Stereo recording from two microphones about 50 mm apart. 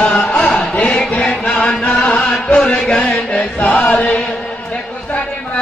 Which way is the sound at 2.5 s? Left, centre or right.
Left.